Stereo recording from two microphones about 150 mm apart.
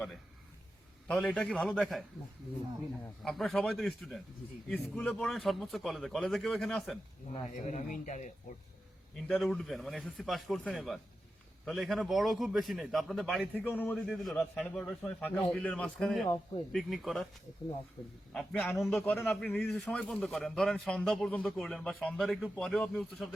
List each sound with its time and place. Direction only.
1.0 s a man's voice: 10° left (ahead or behind)
3.2 s a man's voice: centre (ahead or behind)
7.5 s speech: 50° left (ahead or behind)
9.2 s a man's voice: 5° left (ahead or behind)
13.7 s a man's voice: 10° left (ahead or behind)
14.1 s a man's voice: centre (ahead or behind)
18.3 s a man's voice: 5° left (ahead or behind)
19.1 s a man's voice: 15° left (ahead or behind)